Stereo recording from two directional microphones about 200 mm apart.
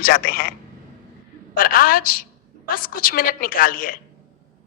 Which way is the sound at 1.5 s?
45° left (ahead or behind).